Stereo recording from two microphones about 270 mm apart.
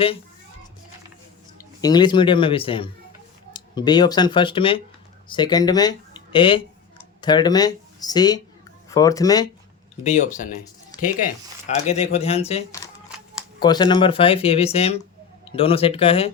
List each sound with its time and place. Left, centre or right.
1.8 s speech: centre
10.0 s speech: left